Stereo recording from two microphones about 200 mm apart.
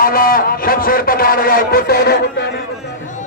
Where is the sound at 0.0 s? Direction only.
45° left (ahead or behind).